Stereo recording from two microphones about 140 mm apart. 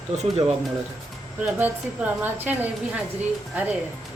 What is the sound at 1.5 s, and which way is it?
A woman's voice, 15° right (ahead or behind).